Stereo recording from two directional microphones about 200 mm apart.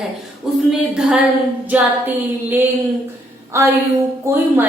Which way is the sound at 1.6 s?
10° right (ahead or behind).